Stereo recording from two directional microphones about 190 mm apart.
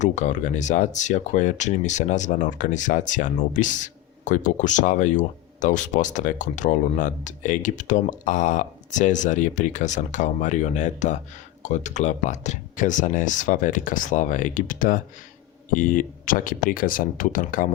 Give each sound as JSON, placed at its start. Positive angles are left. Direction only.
{"t": 0.0, "sound": "speech", "side_deg": 40}